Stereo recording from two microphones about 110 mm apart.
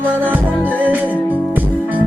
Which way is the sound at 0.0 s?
15° right (ahead or behind).